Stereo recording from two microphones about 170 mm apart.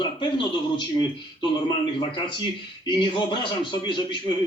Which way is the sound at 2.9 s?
25° left (ahead or behind).